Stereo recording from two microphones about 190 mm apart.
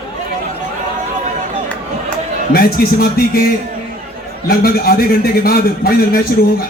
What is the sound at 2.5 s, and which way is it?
Speech, 50° left (ahead or behind).